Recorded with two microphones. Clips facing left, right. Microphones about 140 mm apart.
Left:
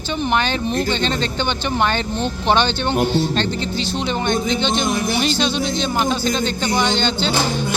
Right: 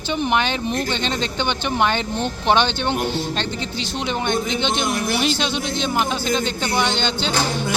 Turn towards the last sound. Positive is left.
turn(degrees=-15)  # may be behind; listen again after turning